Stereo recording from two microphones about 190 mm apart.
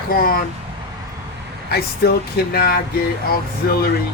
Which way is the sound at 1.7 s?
55° left (ahead or behind).